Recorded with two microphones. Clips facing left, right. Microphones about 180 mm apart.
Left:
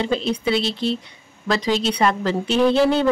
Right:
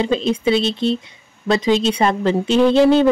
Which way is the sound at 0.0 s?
20° right (ahead or behind).